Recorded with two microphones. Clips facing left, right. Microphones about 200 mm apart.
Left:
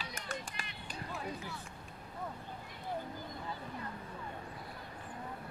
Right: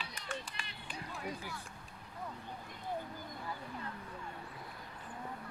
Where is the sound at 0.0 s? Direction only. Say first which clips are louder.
Left 1 dB; 45° left (ahead or behind).